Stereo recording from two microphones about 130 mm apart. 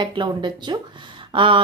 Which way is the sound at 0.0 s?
35° right (ahead or behind).